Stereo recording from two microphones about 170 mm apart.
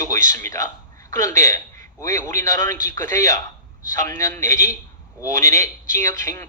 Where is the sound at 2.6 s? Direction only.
50° right (ahead or behind).